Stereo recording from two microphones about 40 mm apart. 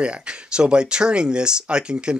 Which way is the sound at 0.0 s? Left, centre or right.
Right.